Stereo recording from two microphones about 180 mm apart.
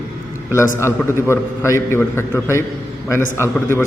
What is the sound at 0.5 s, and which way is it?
A man's voice, 15° left (ahead or behind).